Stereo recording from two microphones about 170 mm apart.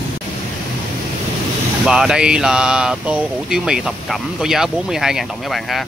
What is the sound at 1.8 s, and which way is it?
Speech, 5° right (ahead or behind).